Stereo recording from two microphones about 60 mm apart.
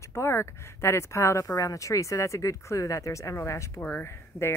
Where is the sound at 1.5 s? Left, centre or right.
Left.